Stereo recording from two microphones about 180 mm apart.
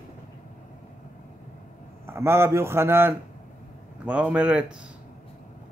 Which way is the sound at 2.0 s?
15° right (ahead or behind).